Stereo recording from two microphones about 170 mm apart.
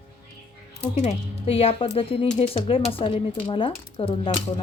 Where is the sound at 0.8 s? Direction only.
40° left (ahead or behind).